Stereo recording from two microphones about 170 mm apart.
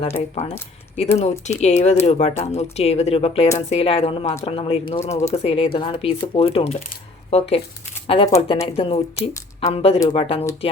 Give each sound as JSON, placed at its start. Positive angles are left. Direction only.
{"t": 1.2, "sound": "speech", "side_deg": 40}